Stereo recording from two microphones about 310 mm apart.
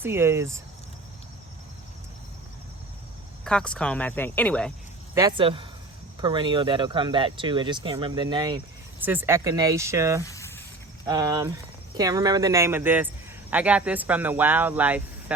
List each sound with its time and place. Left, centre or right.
0.0 s speech: centre
3.4 s speech: centre
5.1 s speech: centre
10.2 s snake: centre
11.0 s speech: centre